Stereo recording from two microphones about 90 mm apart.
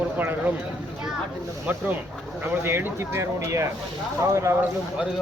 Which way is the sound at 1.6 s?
20° right (ahead or behind).